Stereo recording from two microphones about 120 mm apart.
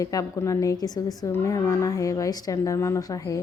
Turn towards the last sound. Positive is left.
turn(degrees=25)  # may be behind; listen again after turning